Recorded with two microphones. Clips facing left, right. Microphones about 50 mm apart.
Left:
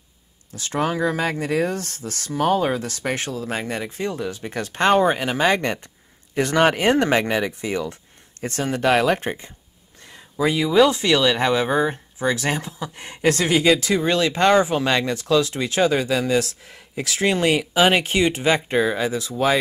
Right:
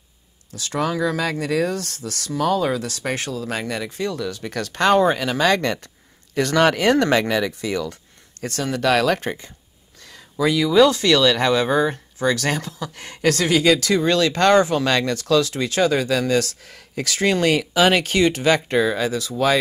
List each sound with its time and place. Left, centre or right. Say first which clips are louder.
0.5 s speech: even; left